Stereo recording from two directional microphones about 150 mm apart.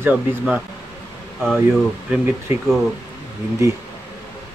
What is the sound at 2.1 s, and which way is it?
Speech, 15° right (ahead or behind).